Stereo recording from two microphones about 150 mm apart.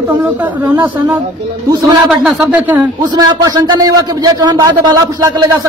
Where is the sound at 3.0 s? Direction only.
25° right (ahead or behind).